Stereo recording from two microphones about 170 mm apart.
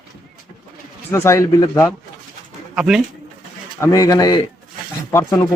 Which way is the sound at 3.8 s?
20° left (ahead or behind).